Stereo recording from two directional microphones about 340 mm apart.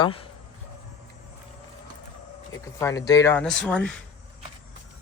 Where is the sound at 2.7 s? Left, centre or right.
Centre.